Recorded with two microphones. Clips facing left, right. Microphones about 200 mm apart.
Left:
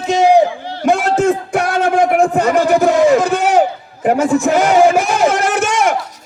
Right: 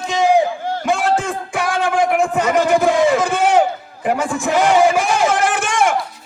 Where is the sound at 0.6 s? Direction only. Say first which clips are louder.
Right 1 dB; 45° right (ahead or behind).